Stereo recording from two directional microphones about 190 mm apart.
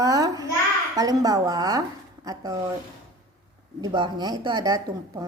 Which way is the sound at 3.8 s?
25° right (ahead or behind).